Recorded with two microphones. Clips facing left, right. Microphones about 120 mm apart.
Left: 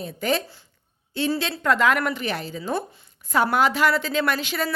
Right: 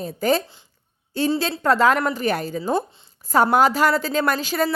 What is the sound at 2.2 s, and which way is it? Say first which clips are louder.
A woman's voice: right 5 dB; 45° right (ahead or behind).